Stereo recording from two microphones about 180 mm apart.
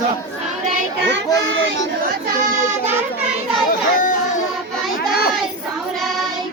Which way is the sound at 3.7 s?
45° left (ahead or behind).